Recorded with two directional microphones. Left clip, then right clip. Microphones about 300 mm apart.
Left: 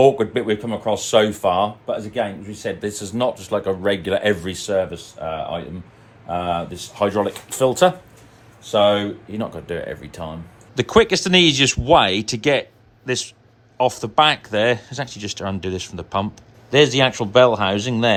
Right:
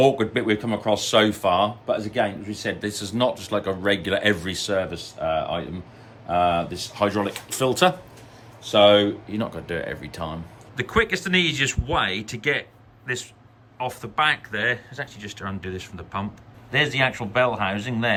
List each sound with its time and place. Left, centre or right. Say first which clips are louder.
0.0 s speech: left 4 dB; centre
10.8 s speech: left 7 dB; centre